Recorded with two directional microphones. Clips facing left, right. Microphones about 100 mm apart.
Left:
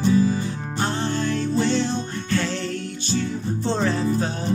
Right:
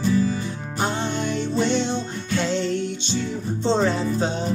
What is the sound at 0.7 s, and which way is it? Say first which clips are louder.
Music: even; 15° right (ahead or behind).